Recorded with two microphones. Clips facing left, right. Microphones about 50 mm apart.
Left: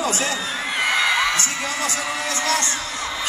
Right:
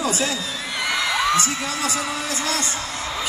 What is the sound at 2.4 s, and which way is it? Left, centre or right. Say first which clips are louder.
Speech: left 4 dB; left.